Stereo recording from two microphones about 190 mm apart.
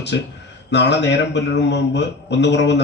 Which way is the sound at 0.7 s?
65° left (ahead or behind).